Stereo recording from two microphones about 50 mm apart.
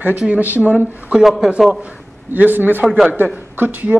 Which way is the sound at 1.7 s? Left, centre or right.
Right.